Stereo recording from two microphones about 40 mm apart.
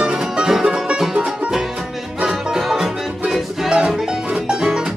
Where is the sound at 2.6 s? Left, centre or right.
Centre.